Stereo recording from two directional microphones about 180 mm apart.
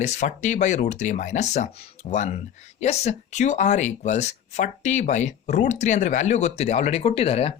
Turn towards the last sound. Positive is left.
turn(degrees=35)  # may be behind; listen again after turning